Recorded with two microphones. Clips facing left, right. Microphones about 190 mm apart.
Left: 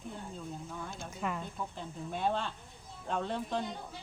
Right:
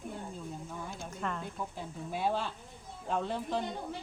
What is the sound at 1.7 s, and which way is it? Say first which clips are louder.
Speech: right 1 dB; 5° right (ahead or behind).